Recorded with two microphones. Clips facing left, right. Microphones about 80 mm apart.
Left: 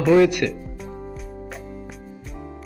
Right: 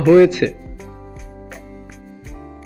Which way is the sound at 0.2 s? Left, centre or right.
Right.